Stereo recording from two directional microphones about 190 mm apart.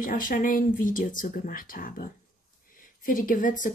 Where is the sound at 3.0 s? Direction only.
45° left (ahead or behind).